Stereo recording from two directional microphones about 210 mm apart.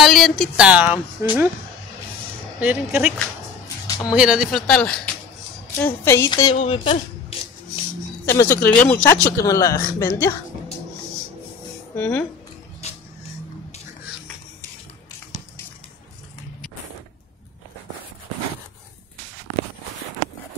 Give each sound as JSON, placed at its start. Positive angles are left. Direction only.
{"t": 0.0, "sound": "speech", "side_deg": 0}
{"t": 0.9, "sound": "speech", "side_deg": 20}
{"t": 2.6, "sound": "speech", "side_deg": -10}
{"t": 3.2, "sound": "music", "side_deg": 15}
{"t": 4.1, "sound": "speech", "side_deg": -5}
{"t": 6.0, "sound": "speech", "side_deg": 15}
{"t": 8.3, "sound": "speech", "side_deg": 10}
{"t": 11.9, "sound": "speech", "side_deg": 5}
{"t": 12.8, "sound": "music", "side_deg": 30}